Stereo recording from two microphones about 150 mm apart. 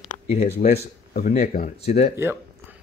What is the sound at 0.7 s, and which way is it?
Speech, 90° left.